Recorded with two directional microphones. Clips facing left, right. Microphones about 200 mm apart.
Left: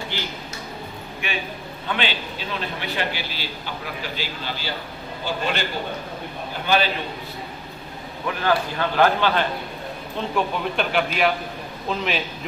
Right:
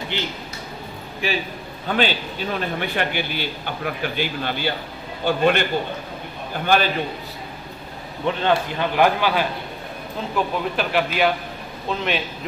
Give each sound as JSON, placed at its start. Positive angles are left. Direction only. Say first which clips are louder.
{"t": 0.1, "sound": "speech", "louder": "right 5 dB", "side_deg": -20}
{"t": 1.2, "sound": "a man's voice", "louder": "right 5 dB", "side_deg": -35}
{"t": 8.3, "sound": "a man's voice", "louder": "right 2 dB", "side_deg": -25}